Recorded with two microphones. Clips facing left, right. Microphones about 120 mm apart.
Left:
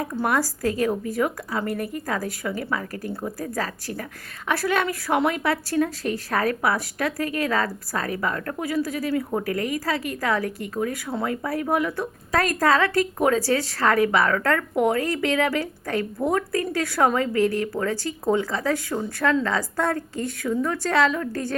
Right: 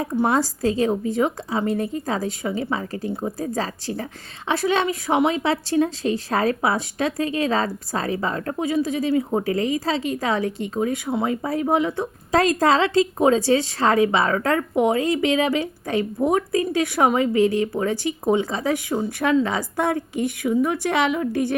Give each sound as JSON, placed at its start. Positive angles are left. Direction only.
{"t": 0.0, "sound": "a woman's voice", "side_deg": -25}